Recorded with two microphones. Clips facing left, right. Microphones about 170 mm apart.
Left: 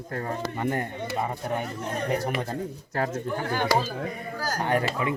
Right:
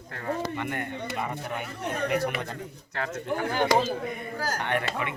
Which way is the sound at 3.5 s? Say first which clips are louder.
Right 2 dB; 20° right (ahead or behind).